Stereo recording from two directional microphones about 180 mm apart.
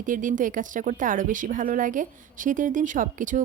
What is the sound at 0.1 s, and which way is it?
A woman's voice, 45° right (ahead or behind).